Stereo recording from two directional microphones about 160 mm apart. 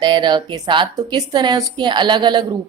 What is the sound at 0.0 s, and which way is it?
A woman's voice, 30° right (ahead or behind).